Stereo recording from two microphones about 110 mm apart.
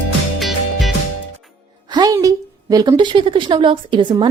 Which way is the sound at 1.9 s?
35° right (ahead or behind).